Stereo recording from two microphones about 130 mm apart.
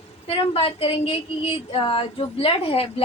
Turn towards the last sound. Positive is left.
turn(degrees=45)  # may be behind; listen again after turning